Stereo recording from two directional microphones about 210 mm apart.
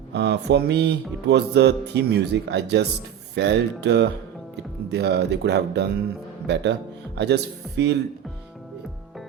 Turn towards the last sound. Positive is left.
turn(degrees=-55)  # may be behind; listen again after turning